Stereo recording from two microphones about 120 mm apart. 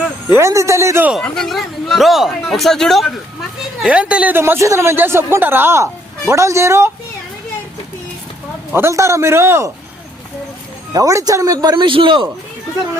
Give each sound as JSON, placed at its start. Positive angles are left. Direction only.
{"t": 0.3, "sound": "speech", "side_deg": -20}
{"t": 1.2, "sound": "speech", "side_deg": 0}
{"t": 3.8, "sound": "speech", "side_deg": -10}
{"t": 8.7, "sound": "speech", "side_deg": -20}
{"t": 10.9, "sound": "speech", "side_deg": -30}